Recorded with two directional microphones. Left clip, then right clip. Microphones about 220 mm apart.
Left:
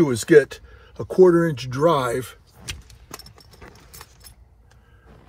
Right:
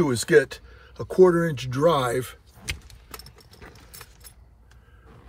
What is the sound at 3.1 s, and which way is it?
Vehicle, 25° left (ahead or behind).